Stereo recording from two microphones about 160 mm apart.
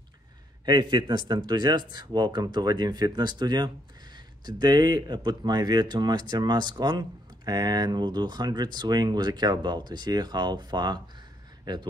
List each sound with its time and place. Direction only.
0.7 s speech: 30° right (ahead or behind)